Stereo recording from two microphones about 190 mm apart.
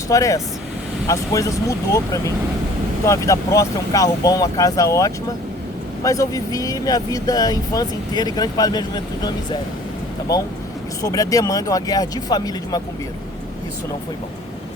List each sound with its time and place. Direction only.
0.1 s speech: 15° left (ahead or behind)
11.0 s speech: 15° left (ahead or behind)